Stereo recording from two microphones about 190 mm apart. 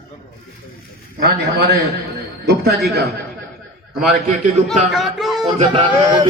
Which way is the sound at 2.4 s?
60° right (ahead or behind).